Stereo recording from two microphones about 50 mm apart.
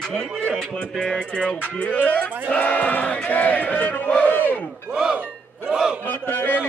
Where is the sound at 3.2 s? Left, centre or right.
Left.